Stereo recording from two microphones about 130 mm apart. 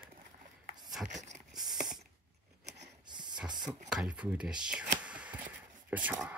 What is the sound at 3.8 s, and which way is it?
Speech, 5° right (ahead or behind).